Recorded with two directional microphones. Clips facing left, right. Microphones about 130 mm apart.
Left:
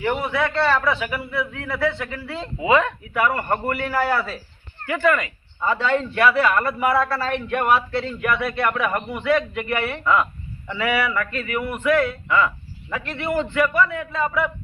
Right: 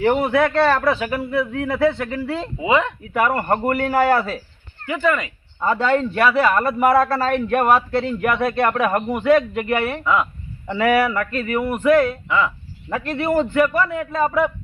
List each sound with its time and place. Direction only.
0.0 s a man's voice: 45° right (ahead or behind)
4.9 s speech: 15° right (ahead or behind)
5.6 s a man's voice: 40° right (ahead or behind)
10.0 s speech: 10° right (ahead or behind)
10.7 s speech: 45° right (ahead or behind)